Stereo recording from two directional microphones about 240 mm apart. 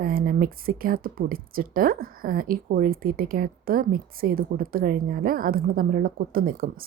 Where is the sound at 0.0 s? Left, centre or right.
Right.